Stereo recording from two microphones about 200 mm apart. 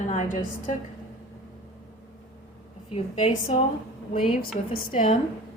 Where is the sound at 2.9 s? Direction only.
30° left (ahead or behind).